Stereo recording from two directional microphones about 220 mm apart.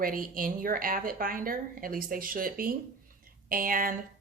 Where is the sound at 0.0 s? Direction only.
40° right (ahead or behind).